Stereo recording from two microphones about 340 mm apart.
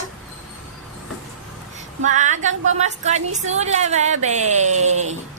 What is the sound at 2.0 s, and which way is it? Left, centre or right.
A woman's voice, right.